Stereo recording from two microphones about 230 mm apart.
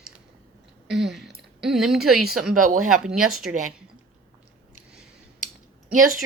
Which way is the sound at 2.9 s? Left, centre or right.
Centre.